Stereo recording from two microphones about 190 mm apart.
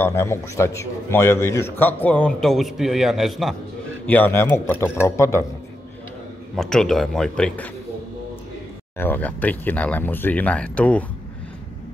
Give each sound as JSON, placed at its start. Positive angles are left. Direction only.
{"t": 0.0, "sound": "a man's voice", "side_deg": 15}
{"t": 6.5, "sound": "a man's voice", "side_deg": 5}
{"t": 8.9, "sound": "a man's voice", "side_deg": 10}